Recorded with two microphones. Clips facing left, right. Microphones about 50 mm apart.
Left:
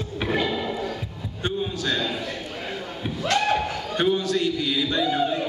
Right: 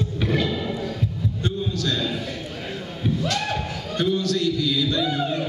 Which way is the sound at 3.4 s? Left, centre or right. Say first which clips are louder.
Left 4 dB; left.